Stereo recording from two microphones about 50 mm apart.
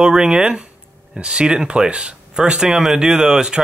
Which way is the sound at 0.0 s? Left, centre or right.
Centre.